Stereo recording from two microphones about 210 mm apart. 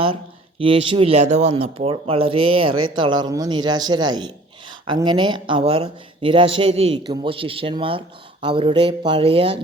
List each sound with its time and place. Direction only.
0.6 s speech: 25° right (ahead or behind)